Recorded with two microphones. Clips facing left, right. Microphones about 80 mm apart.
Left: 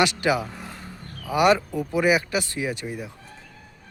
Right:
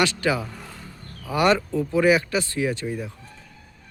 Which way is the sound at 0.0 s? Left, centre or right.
Centre.